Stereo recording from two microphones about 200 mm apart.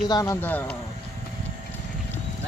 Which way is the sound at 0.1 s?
15° left (ahead or behind).